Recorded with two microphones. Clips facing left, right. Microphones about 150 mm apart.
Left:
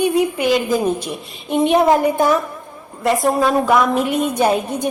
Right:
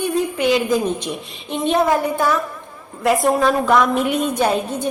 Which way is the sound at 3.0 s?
Centre (ahead or behind).